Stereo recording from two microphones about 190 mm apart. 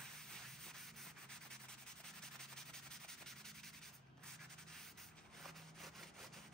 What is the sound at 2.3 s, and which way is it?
Rub, 5° left (ahead or behind).